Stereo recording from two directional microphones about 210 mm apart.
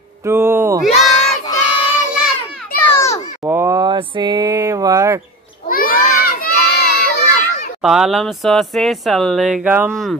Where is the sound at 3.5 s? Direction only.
15° right (ahead or behind).